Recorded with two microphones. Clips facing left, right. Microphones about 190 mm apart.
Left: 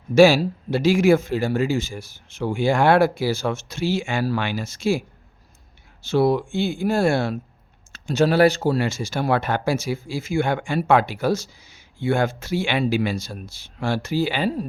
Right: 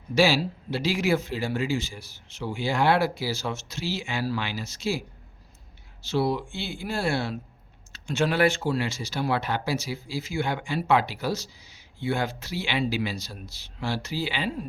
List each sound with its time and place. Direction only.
0.1 s speech: 45° left (ahead or behind)